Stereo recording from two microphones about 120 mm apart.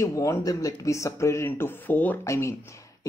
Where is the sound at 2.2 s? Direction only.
25° left (ahead or behind).